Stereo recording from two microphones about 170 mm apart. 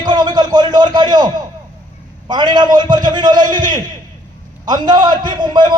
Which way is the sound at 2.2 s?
25° right (ahead or behind).